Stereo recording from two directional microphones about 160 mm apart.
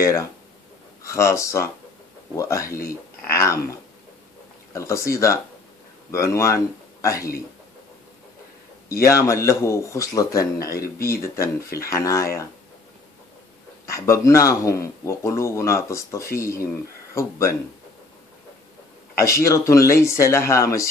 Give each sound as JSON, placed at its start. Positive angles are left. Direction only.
{"t": 1.0, "sound": "speech", "side_deg": 20}
{"t": 8.8, "sound": "speech", "side_deg": 20}
{"t": 13.8, "sound": "speech", "side_deg": 20}
{"t": 19.1, "sound": "speech", "side_deg": 20}